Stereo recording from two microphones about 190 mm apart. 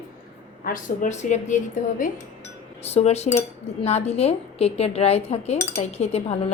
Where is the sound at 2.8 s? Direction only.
35° left (ahead or behind).